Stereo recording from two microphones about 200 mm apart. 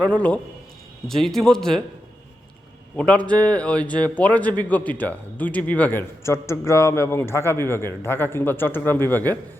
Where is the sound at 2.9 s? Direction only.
5° left (ahead or behind).